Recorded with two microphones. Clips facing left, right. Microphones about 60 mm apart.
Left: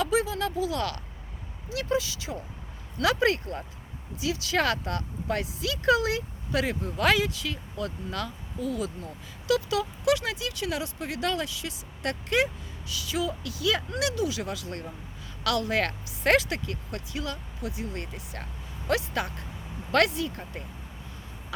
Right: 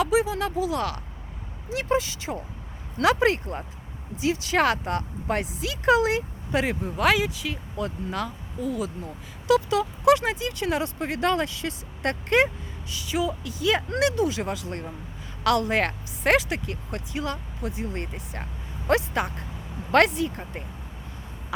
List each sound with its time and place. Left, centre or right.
0.0 s speech: centre
1.7 s speech: right
6.9 s speech: centre; by 12.5 s right
12.9 s speech: right